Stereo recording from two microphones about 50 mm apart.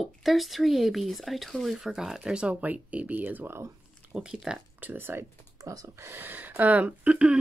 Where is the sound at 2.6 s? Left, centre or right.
Right.